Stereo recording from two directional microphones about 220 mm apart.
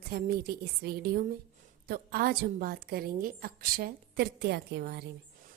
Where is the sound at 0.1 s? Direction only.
45° right (ahead or behind).